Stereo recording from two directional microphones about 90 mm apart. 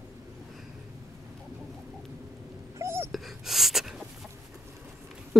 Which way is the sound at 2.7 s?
30° right (ahead or behind).